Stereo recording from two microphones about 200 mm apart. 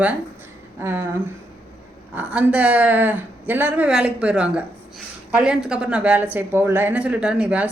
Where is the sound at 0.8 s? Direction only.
10° right (ahead or behind).